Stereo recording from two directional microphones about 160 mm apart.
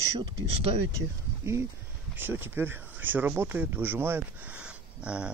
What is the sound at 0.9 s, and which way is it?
Speech, 15° right (ahead or behind).